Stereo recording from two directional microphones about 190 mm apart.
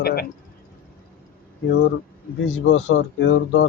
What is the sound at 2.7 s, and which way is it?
A man's voice, 75° left (ahead or behind).